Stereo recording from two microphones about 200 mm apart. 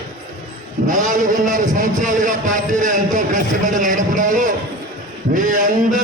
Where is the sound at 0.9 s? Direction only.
40° right (ahead or behind).